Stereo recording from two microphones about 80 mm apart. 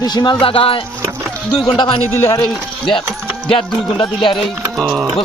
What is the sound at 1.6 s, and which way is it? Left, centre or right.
Speech, left.